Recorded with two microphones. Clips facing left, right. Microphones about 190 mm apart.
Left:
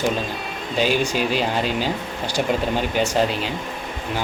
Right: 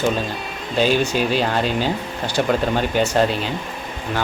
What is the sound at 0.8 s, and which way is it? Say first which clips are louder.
Speech: right 2 dB; 10° left (ahead or behind).